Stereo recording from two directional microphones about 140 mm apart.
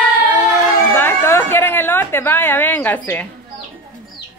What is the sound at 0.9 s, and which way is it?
A woman's voice, 15° left (ahead or behind).